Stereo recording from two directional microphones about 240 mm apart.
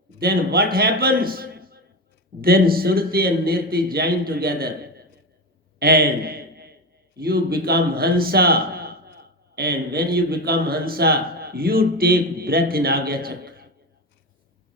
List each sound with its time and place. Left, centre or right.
0.2 s a man's voice: right
5.8 s a sound: right
7.3 s a man's voice: right